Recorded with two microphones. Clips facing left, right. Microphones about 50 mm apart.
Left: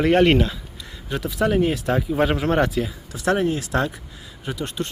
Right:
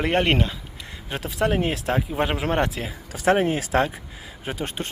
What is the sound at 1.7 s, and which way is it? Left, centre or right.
Speech, centre.